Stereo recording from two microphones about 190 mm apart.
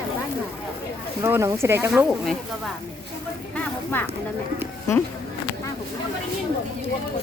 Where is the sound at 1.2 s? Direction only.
15° right (ahead or behind).